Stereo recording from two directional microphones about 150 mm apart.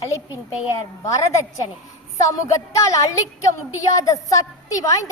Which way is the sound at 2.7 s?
20° left (ahead or behind).